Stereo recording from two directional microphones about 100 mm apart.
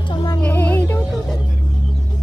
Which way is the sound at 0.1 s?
45° left (ahead or behind).